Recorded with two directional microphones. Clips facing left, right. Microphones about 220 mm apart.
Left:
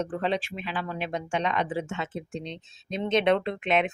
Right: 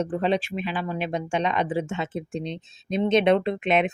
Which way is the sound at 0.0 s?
15° right (ahead or behind).